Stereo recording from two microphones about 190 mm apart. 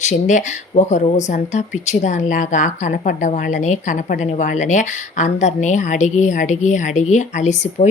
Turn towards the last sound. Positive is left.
turn(degrees=40)  # may be behind; listen again after turning